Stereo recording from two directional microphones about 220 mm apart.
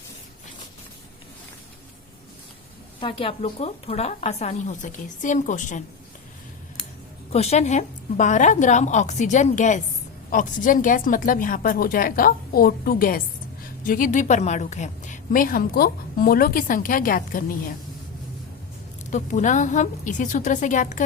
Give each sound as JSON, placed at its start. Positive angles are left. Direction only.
{"t": 3.0, "sound": "a woman's voice", "side_deg": 25}
{"t": 7.3, "sound": "a woman's voice", "side_deg": 30}
{"t": 19.1, "sound": "a woman's voice", "side_deg": 35}